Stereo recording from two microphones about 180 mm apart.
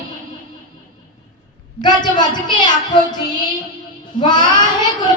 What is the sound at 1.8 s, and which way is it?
Child singing, 25° left (ahead or behind).